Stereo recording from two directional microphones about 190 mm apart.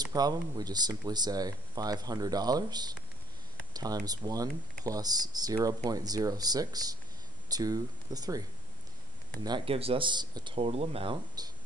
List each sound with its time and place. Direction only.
0.1 s speech: 20° right (ahead or behind)